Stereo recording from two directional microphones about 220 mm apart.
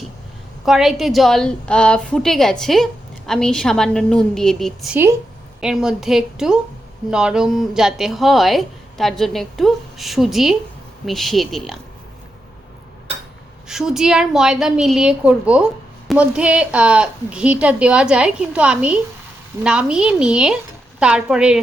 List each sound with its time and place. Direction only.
0.6 s a woman's voice: centre (ahead or behind)
13.7 s a woman's voice: centre (ahead or behind)